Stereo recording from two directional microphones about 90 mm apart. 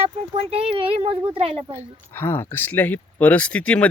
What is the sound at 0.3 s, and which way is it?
Speech, 90° right.